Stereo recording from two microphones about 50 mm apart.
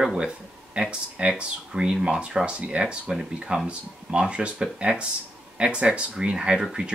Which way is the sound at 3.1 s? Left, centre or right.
Centre.